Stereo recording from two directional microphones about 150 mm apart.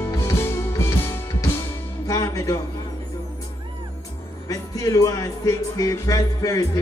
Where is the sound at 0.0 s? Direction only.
15° left (ahead or behind).